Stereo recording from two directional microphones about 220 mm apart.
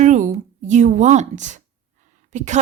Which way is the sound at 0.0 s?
35° right (ahead or behind).